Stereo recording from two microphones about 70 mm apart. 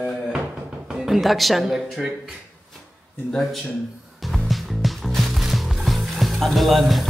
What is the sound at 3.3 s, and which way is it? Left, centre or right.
Speech, centre.